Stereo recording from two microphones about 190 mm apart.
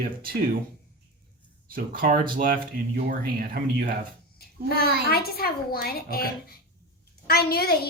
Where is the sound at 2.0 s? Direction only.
45° right (ahead or behind).